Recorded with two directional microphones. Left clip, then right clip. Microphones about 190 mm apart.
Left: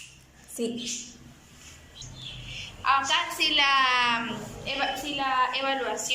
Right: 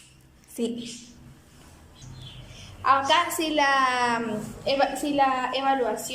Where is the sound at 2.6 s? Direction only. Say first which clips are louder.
Right 2 dB; 50° right (ahead or behind).